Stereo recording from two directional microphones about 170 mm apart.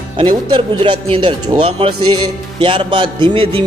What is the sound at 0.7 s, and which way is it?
Music, 30° right (ahead or behind).